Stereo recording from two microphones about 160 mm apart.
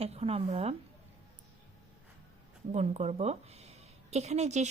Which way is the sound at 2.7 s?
45° right (ahead or behind).